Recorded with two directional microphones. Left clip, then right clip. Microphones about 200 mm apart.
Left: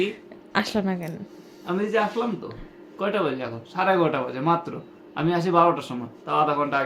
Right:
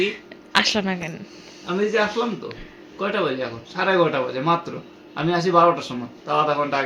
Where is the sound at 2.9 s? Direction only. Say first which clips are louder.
Right 2 dB; 30° left (ahead or behind).